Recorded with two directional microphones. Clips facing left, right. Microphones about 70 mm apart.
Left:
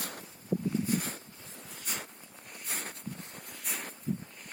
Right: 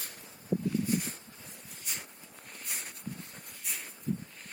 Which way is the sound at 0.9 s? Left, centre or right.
Left.